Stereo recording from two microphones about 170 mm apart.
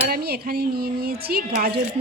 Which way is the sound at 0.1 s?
65° right (ahead or behind).